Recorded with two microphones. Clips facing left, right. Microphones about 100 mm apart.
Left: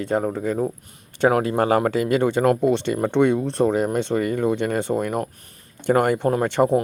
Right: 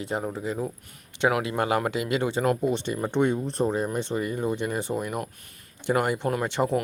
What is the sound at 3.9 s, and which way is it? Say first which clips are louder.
Speech: left 6 dB; 65° left (ahead or behind).